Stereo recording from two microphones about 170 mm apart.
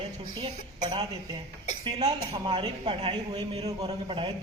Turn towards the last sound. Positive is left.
turn(degrees=-30)  # may be behind; listen again after turning